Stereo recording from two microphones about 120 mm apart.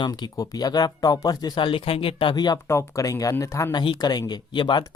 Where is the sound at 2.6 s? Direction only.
25° left (ahead or behind).